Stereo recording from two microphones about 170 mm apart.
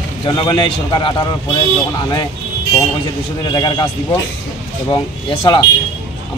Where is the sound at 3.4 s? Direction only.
25° left (ahead or behind).